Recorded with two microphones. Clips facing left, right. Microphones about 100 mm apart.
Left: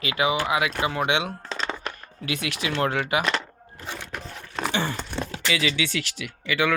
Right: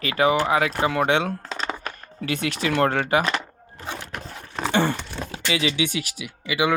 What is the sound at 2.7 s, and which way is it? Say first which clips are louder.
Speech: right 4 dB; 50° right (ahead or behind).